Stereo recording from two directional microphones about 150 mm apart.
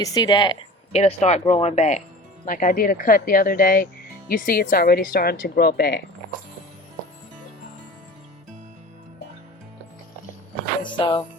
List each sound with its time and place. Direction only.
0.0 s speech: 25° left (ahead or behind)
0.9 s speech: 45° left (ahead or behind)
2.5 s a woman's voice: 65° left (ahead or behind); by 6.0 s 90° left
10.8 s music: 35° left (ahead or behind)